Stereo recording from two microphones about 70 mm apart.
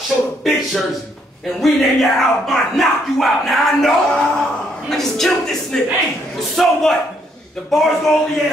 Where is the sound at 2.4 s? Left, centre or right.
Centre.